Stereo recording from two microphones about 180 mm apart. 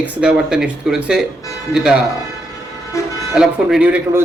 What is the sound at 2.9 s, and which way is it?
Vehicle, 15° left (ahead or behind).